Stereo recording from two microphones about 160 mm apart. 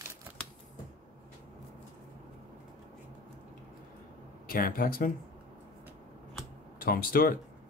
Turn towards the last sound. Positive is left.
turn(degrees=65)  # may be behind; listen again after turning